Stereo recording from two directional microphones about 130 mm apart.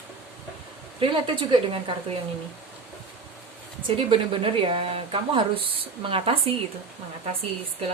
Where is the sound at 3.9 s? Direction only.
40° right (ahead or behind).